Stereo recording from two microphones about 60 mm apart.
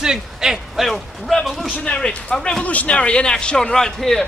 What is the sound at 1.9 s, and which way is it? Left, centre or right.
A man's voice, centre.